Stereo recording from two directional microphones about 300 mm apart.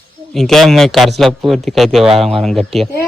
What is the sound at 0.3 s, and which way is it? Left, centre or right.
Speech, centre.